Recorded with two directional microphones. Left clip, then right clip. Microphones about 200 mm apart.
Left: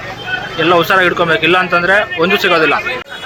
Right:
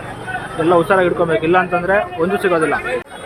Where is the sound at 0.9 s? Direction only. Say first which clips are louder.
Left 3 dB; 5° right (ahead or behind).